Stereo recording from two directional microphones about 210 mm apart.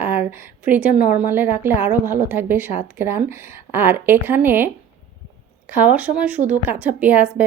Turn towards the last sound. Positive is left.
turn(degrees=-5)  # may be behind; listen again after turning